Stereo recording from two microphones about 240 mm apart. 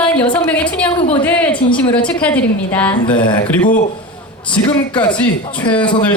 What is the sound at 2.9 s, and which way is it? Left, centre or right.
Speech, centre.